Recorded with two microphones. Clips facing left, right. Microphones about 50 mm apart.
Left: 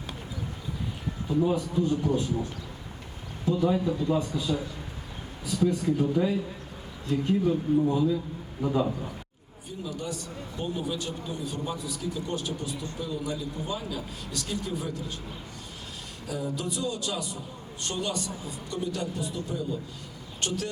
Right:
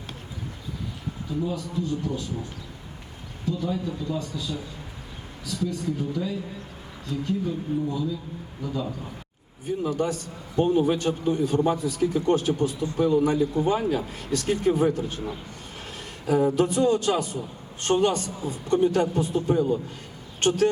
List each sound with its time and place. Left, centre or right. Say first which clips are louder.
1.4 s speech: left 4 dB; left
3.7 s speech: left 3 dB; left
9.6 s a man's voice: right 9 dB; right
16.2 s a man's voice: right 11 dB; right